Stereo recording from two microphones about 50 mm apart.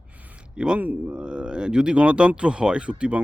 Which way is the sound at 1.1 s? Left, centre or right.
Centre.